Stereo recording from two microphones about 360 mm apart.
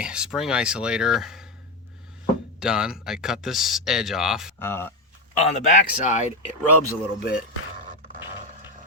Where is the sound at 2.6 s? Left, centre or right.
Centre.